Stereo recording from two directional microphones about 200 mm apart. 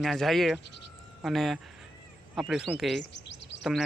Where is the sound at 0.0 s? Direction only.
Centre (ahead or behind).